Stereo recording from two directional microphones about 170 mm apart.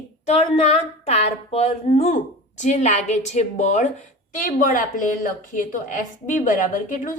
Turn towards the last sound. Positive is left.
turn(degrees=50)  # may be behind; listen again after turning